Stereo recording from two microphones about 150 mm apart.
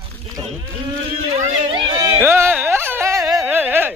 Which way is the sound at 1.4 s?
40° right (ahead or behind).